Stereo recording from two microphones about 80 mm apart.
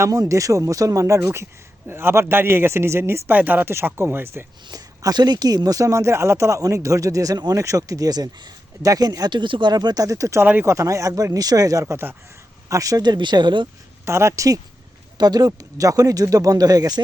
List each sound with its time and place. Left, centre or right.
0.1 s a man's voice: right
4.7 s speech: right
7.5 s speech: right
9.3 s speech: right
10.4 s a man's voice: right
10.7 s speech: right
13.1 s speech: right
14.0 s speech: right
15.2 s speech: right